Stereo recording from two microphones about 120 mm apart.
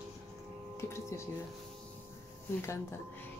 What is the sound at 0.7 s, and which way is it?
Tuning fork, 20° left (ahead or behind).